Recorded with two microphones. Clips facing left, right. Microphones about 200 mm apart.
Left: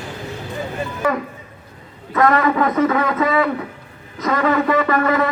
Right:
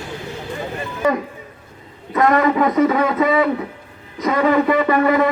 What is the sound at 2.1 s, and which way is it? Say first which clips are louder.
Speech: right 1 dB; 20° right (ahead or behind).